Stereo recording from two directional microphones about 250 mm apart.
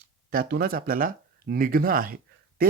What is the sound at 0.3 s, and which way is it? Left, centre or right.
Speech, right.